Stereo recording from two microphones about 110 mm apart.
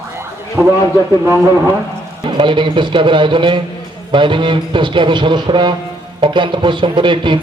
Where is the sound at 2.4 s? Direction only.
45° right (ahead or behind).